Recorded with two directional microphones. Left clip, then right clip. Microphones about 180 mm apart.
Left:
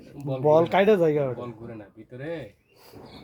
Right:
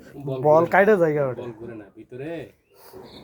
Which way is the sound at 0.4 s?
5° right (ahead or behind).